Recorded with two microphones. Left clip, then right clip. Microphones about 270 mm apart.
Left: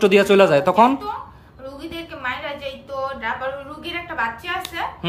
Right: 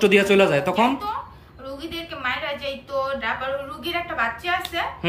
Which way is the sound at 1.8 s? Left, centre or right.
Centre.